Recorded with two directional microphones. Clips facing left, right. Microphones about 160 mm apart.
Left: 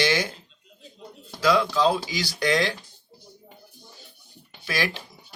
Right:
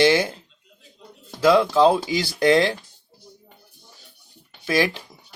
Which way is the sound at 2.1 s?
55° right (ahead or behind).